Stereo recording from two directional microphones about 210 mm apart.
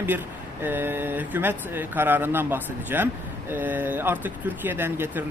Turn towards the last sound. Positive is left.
turn(degrees=-10)  # may be behind; listen again after turning